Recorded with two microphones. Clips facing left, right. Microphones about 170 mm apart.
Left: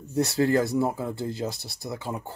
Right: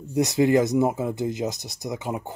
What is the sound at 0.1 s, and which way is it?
Speech, 15° right (ahead or behind).